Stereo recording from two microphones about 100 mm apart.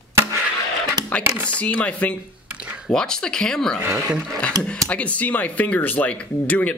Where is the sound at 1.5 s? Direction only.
15° left (ahead or behind).